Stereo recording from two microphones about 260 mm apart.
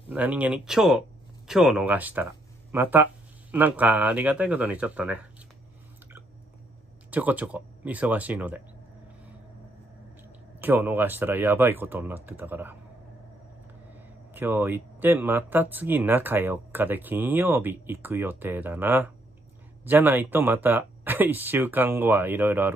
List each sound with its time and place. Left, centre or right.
0.1 s speech: centre
7.1 s speech: centre
10.6 s speech: centre
13.9 s speech: centre